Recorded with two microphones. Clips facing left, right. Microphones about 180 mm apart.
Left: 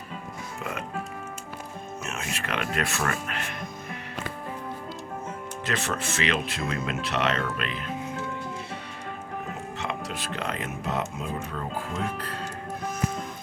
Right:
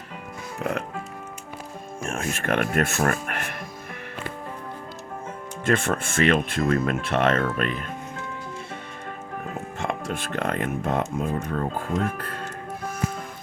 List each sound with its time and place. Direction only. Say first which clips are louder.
0.6 s speech: right 8 dB; 65° right (ahead or behind)
2.0 s speech: right 8 dB; 50° right (ahead or behind)
5.6 s speech: right 7 dB; 50° right (ahead or behind)
9.7 s speech: right 5 dB; 50° right (ahead or behind)